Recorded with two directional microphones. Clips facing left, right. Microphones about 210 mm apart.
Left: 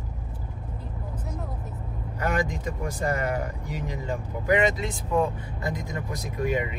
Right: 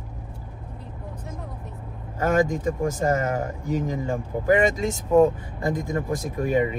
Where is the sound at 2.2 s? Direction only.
45° right (ahead or behind).